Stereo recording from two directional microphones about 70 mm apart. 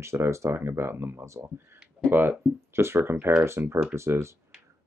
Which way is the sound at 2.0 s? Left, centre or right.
Right.